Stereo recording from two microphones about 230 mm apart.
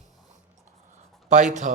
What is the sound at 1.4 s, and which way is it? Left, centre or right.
Speech, right.